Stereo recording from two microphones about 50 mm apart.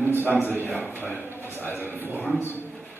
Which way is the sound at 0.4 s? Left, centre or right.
Left.